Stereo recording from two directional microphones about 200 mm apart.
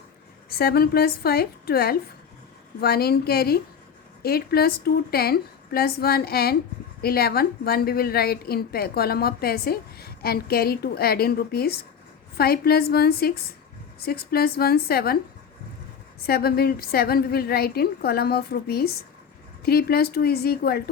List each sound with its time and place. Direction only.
0.6 s a woman's voice: 50° left (ahead or behind)
16.2 s a woman's voice: 50° left (ahead or behind)